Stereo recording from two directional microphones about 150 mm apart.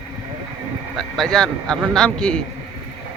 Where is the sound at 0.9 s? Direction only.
5° left (ahead or behind).